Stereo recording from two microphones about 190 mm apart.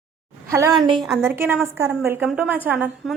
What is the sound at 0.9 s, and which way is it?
A woman's voice, 5° right (ahead or behind).